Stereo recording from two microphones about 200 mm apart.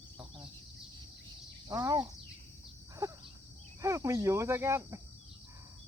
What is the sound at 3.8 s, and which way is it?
Speech, 15° right (ahead or behind).